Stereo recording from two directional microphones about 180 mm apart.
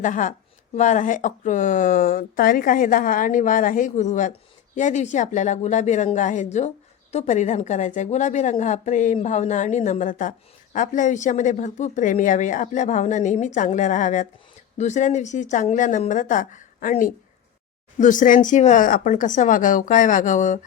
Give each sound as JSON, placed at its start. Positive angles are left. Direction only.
{"t": 0.0, "sound": "a woman's voice", "side_deg": 45}